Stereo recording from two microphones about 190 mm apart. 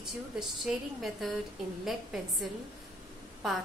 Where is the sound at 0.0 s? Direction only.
Centre (ahead or behind).